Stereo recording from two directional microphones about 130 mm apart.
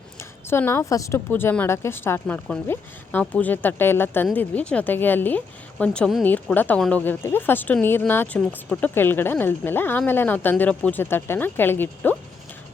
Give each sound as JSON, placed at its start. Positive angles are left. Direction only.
{"t": 0.2, "sound": "a woman's voice", "side_deg": 20}
{"t": 6.2, "sound": "a woman's voice", "side_deg": 15}